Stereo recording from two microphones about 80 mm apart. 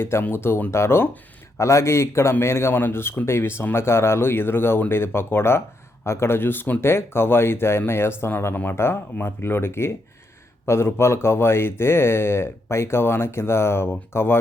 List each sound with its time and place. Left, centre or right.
0.0 s speech: left